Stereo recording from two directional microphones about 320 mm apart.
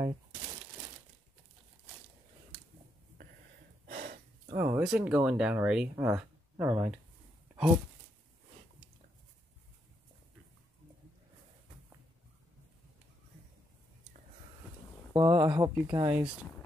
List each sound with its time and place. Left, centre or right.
3.8 s gasp: right
4.6 s speech: centre
15.1 s speech: centre